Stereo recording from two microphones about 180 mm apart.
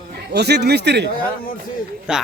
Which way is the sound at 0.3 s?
65° right (ahead or behind).